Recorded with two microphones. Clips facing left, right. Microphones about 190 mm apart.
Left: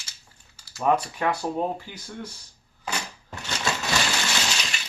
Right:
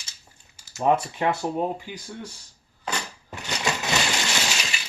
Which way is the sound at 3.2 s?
15° right (ahead or behind).